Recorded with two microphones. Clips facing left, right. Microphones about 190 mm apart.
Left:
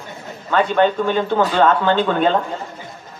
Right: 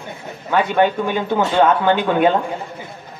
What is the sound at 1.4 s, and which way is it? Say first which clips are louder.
Speech: right 1 dB; 25° right (ahead or behind).